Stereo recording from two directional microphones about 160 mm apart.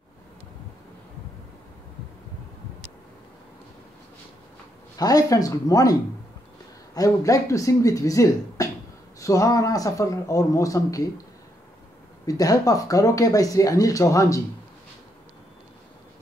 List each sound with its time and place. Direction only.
4.9 s speech: 20° left (ahead or behind)
12.3 s speech: 20° left (ahead or behind)